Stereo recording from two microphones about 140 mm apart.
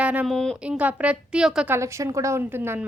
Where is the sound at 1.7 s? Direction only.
20° right (ahead or behind).